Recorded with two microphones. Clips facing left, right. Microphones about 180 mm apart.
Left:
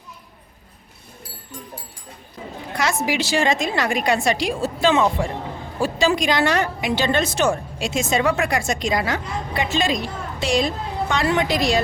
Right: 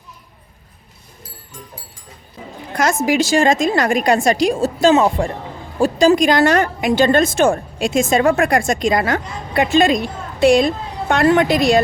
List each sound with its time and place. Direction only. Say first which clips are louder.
3.0 s a woman's voice: right 7 dB; 45° right (ahead or behind)